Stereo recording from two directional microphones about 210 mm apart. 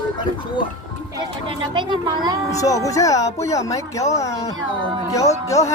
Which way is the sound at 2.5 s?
15° left (ahead or behind).